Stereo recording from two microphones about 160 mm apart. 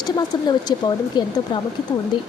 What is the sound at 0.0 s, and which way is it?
Speech, 25° left (ahead or behind).